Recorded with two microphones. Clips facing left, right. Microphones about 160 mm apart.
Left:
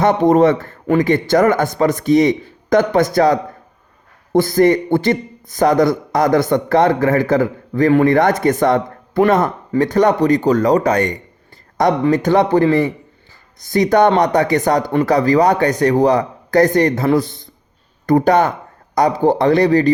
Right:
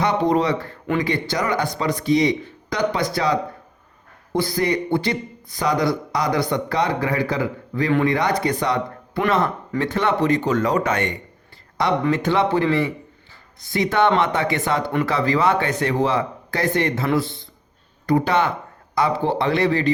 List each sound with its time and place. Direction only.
0.0 s a man's voice: 45° left (ahead or behind)